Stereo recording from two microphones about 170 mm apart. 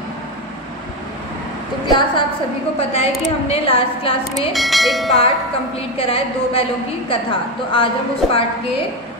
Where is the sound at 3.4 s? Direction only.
35° left (ahead or behind).